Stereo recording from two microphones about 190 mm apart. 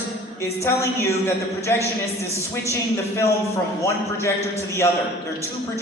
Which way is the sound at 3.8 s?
15° left (ahead or behind).